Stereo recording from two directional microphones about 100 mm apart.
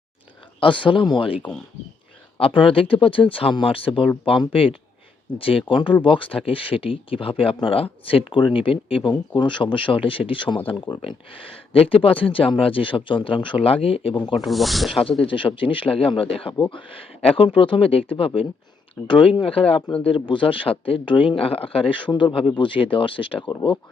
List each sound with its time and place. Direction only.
0.6 s speech: 55° left (ahead or behind)
2.6 s speech: 65° left (ahead or behind)
9.3 s speech: 55° left (ahead or behind); by 14.2 s 70° left (ahead or behind)
14.3 s speech: centre (ahead or behind)
15.2 s speech: 60° left (ahead or behind)
19.0 s speech: 55° left (ahead or behind)
19.4 s speech: 70° left (ahead or behind)